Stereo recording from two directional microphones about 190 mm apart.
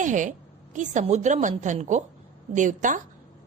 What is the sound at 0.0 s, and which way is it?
A woman's voice, 40° right (ahead or behind).